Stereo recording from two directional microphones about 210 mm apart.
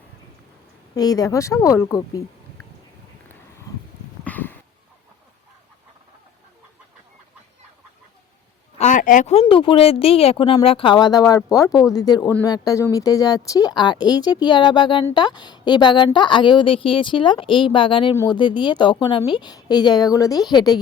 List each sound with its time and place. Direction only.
0.9 s speech: 20° left (ahead or behind)
4.2 s a sound: 10° left (ahead or behind)
8.8 s a woman's voice: 35° left (ahead or behind); by 20.7 s 20° left (ahead or behind)